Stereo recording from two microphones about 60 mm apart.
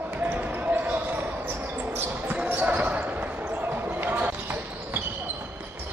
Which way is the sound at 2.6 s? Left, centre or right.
Right.